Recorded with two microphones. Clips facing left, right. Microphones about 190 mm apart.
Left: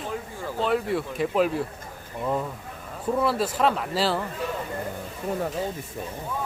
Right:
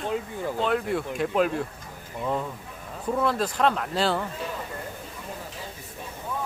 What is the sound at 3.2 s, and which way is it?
Speech, 5° left (ahead or behind).